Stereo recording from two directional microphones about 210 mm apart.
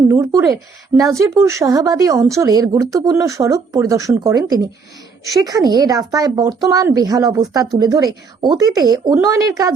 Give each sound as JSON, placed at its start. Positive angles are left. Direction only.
{"t": 0.1, "sound": "speech", "side_deg": -15}